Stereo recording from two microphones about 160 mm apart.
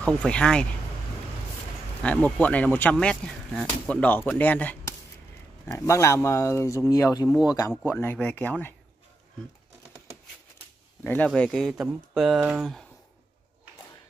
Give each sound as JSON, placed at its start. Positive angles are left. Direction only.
{"t": 0.0, "sound": "speech", "side_deg": 5}
{"t": 2.0, "sound": "speech", "side_deg": 10}
{"t": 11.1, "sound": "speech", "side_deg": 5}